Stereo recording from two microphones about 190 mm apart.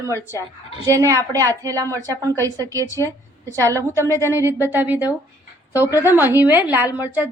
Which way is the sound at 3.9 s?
15° left (ahead or behind).